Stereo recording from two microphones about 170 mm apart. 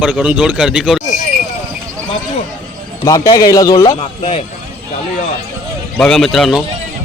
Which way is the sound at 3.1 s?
20° left (ahead or behind).